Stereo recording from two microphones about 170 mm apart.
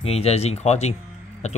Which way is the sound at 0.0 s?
35° left (ahead or behind).